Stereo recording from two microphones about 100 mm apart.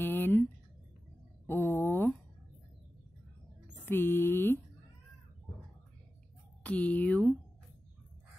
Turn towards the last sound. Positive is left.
turn(degrees=15)  # may be behind; listen again after turning